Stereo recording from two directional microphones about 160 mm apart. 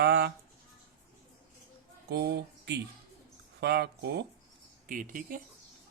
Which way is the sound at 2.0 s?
90° right.